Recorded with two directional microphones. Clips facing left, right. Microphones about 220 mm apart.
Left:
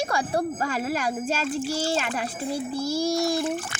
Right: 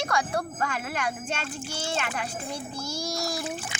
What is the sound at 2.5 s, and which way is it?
Speech, 5° left (ahead or behind).